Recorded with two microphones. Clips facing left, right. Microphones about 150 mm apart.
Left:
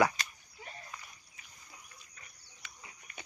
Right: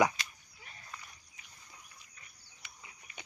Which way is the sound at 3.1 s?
50° left (ahead or behind).